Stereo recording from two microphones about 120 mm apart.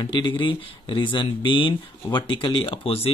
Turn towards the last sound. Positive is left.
turn(degrees=55)  # may be behind; listen again after turning